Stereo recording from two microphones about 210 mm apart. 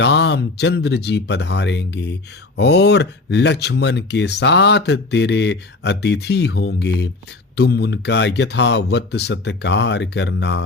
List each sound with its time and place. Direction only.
0.0 s speech: 55° left (ahead or behind)